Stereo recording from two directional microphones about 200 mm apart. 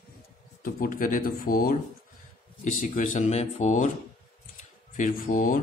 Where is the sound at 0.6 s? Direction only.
45° left (ahead or behind).